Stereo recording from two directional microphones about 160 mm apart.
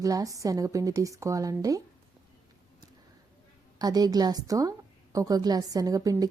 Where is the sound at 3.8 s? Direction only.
25° right (ahead or behind).